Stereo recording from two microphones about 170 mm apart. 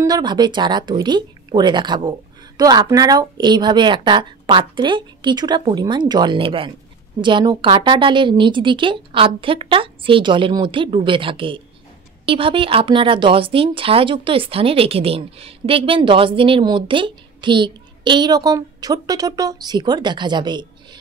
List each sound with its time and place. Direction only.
0.0 s speech: 25° right (ahead or behind)